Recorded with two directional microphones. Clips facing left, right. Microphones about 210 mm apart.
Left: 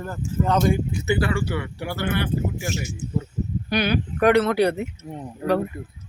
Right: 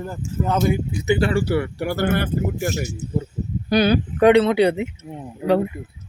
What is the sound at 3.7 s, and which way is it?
Speech, 25° right (ahead or behind).